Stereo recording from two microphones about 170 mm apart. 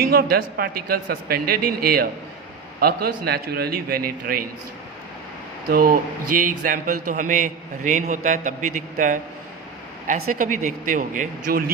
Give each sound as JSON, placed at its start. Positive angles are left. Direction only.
{"t": 0.1, "sound": "a man's voice", "side_deg": -60}
{"t": 5.6, "sound": "a man's voice", "side_deg": -60}